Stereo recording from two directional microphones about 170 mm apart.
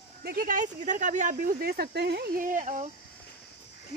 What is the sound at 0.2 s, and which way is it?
Speech, 65° right (ahead or behind).